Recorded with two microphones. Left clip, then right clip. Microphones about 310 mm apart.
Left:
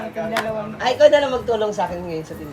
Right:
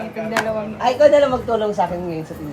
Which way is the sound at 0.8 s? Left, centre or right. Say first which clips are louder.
Even; centre.